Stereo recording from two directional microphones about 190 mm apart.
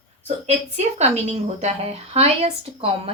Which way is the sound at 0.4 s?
35° right (ahead or behind).